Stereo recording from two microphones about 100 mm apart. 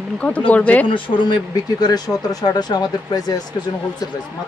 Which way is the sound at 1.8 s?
40° left (ahead or behind).